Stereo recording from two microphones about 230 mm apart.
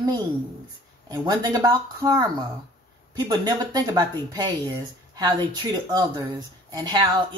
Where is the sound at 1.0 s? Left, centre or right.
Centre.